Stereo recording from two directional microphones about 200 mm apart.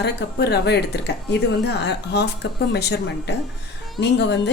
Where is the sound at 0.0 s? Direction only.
55° left (ahead or behind).